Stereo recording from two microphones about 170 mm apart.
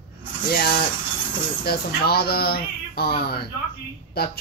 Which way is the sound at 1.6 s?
65° left (ahead or behind).